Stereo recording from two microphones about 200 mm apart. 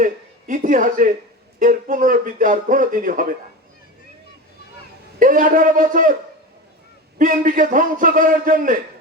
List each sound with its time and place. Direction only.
0.0 s a man's voice: 40° right (ahead or behind)
5.2 s a man's voice: 40° right (ahead or behind)
7.2 s a man's voice: 40° right (ahead or behind)